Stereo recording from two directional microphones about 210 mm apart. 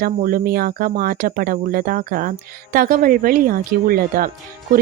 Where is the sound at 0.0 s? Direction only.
45° right (ahead or behind).